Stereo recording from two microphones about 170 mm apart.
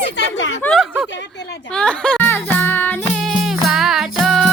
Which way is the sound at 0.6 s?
Centre (ahead or behind).